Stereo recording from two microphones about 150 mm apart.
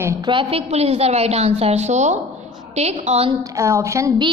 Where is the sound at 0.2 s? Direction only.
35° right (ahead or behind).